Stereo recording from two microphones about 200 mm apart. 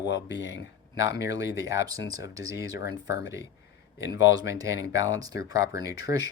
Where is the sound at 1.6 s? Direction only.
15° right (ahead or behind).